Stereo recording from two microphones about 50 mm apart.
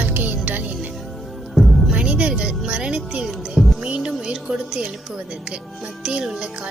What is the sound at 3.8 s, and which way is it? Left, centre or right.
Speech, centre.